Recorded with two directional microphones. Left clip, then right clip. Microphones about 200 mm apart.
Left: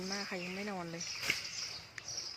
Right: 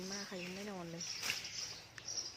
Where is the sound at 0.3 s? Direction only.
10° left (ahead or behind).